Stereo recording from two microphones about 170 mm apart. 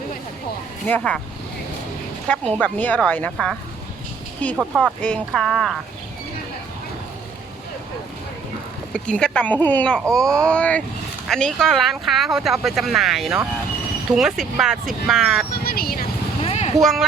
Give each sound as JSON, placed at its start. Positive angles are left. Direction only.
{"t": 0.9, "sound": "speech", "side_deg": 10}
{"t": 2.5, "sound": "speech", "side_deg": 10}
{"t": 4.9, "sound": "speech", "side_deg": 5}
{"t": 8.9, "sound": "speech", "side_deg": 5}
{"t": 15.5, "sound": "vehicle", "side_deg": 60}
{"t": 16.4, "sound": "a sound", "side_deg": 35}
{"t": 16.8, "sound": "speech", "side_deg": 0}